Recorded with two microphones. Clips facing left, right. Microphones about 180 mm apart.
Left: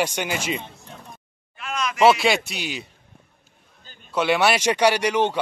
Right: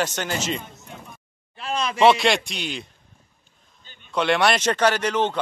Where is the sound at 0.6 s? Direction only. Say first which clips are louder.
Left 1 dB; 30° left (ahead or behind).